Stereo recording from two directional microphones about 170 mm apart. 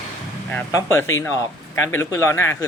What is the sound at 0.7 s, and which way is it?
Speech, 20° left (ahead or behind).